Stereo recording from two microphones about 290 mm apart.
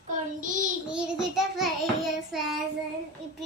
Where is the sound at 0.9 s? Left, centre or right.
Centre.